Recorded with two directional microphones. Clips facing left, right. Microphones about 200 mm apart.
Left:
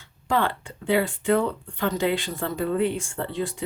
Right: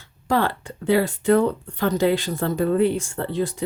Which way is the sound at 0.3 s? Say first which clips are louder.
Right 3 dB; 40° right (ahead or behind).